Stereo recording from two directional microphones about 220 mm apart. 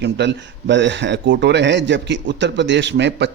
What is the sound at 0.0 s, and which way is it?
A man's voice, 50° right (ahead or behind).